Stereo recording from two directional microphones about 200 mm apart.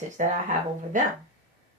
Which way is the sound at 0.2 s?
40° right (ahead or behind).